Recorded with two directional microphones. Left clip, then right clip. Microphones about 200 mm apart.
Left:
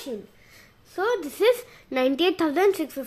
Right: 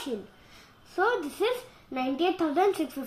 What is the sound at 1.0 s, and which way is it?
A woman's voice, 40° left (ahead or behind).